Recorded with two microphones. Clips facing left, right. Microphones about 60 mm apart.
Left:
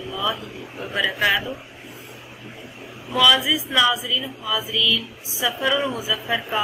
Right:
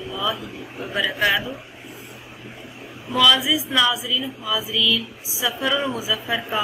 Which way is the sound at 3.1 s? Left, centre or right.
Centre.